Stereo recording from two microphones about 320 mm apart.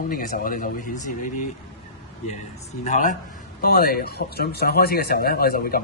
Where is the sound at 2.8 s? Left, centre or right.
Left.